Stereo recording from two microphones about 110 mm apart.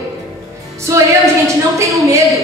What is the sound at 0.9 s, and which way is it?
A woman's voice, 30° right (ahead or behind).